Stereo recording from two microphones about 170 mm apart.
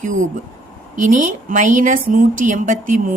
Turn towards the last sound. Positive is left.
turn(degrees=-50)  # may be behind; listen again after turning